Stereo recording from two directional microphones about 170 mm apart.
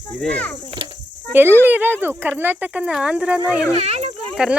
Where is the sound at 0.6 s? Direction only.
30° right (ahead or behind).